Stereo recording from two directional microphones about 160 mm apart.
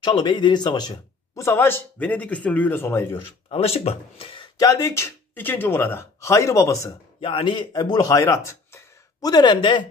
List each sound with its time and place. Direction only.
0.0 s speech: 30° left (ahead or behind)
3.4 s speech: 35° left (ahead or behind)
4.6 s speech: 20° left (ahead or behind)
7.2 s speech: 35° left (ahead or behind)